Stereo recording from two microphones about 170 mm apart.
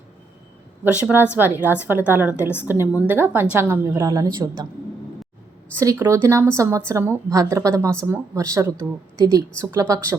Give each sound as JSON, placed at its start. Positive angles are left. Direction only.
{"t": 0.9, "sound": "a woman's voice", "side_deg": -5}
{"t": 5.7, "sound": "a woman's voice", "side_deg": -15}